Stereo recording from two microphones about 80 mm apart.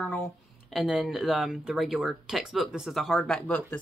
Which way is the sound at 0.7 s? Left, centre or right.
Centre.